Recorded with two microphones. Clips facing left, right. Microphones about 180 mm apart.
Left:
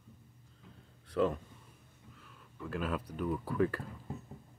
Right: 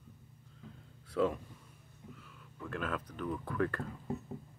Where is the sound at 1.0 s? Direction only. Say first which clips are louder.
Left 1 dB; centre (ahead or behind).